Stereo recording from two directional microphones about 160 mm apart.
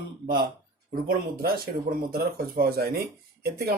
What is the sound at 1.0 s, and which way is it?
Speech, 70° right (ahead or behind).